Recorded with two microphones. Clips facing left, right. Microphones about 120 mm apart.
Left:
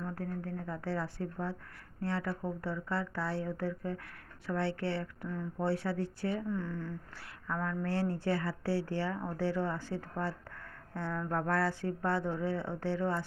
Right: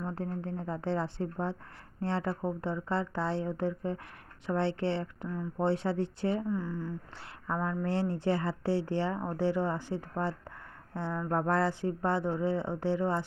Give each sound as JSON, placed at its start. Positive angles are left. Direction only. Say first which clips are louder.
{"t": 0.0, "sound": "speech", "louder": "right 3 dB", "side_deg": -25}
{"t": 6.5, "sound": "speech", "louder": "right 3 dB", "side_deg": -10}